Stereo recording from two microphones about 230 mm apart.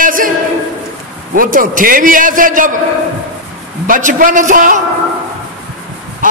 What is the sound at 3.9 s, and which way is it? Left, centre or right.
Speech, right.